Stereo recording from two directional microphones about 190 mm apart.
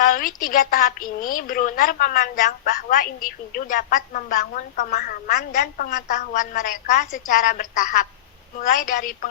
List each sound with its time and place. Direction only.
0.0 s a woman's voice: 45° left (ahead or behind)